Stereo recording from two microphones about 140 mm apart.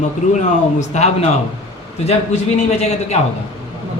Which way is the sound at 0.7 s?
55° left (ahead or behind).